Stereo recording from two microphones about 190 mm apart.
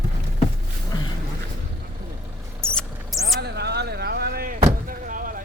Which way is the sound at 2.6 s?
5° left (ahead or behind).